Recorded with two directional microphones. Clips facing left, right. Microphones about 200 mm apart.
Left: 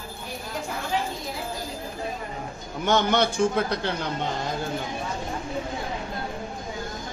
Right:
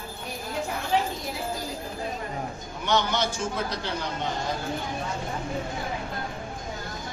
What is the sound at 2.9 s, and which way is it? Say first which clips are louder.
A man's voice: left 4 dB; 55° left (ahead or behind).